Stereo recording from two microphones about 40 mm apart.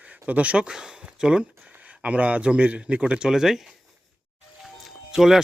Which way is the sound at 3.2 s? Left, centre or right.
Centre.